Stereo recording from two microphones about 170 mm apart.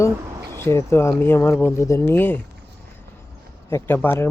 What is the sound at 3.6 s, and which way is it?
Speech, 15° left (ahead or behind).